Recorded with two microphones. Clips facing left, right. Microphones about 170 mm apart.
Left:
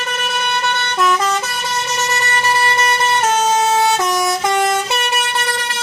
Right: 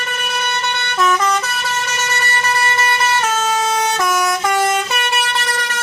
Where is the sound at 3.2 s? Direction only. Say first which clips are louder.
Left 3 dB; 25° left (ahead or behind).